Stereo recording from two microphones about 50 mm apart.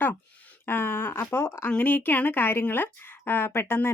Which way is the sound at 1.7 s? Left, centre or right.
Left.